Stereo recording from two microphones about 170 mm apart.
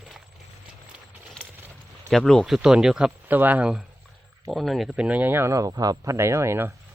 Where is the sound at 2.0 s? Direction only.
5° left (ahead or behind); by 6.7 s 15° right (ahead or behind).